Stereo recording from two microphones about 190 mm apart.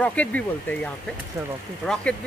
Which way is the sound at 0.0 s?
5° left (ahead or behind).